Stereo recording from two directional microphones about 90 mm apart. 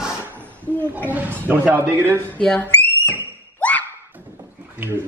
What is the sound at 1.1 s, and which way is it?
Speech, 20° right (ahead or behind).